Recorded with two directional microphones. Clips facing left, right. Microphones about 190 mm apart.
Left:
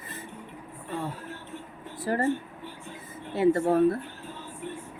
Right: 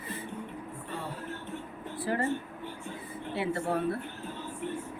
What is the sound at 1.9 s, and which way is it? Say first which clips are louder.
Speech: left 3 dB; 45° left (ahead or behind).